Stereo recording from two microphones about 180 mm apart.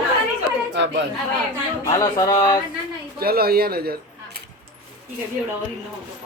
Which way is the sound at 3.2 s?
60° right (ahead or behind).